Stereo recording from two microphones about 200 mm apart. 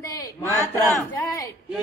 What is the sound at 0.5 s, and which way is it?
Speech, 15° left (ahead or behind).